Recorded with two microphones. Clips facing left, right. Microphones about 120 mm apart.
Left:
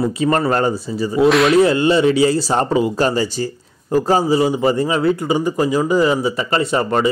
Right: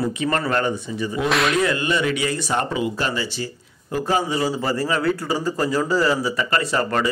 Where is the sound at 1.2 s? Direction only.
Centre (ahead or behind).